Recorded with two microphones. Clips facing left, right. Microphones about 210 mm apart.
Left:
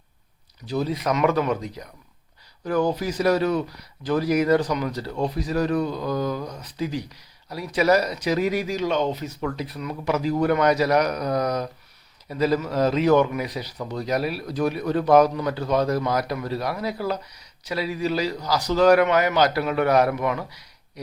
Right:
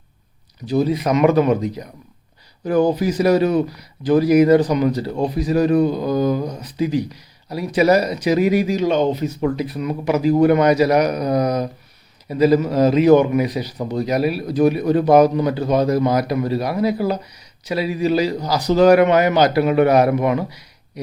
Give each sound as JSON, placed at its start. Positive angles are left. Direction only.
{"t": 0.7, "sound": "a man's voice", "side_deg": -15}